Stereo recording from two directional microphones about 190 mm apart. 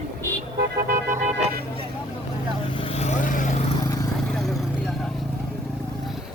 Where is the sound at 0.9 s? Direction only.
40° right (ahead or behind).